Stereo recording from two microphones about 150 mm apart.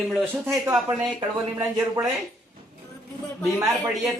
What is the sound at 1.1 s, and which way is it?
Speech, 25° right (ahead or behind).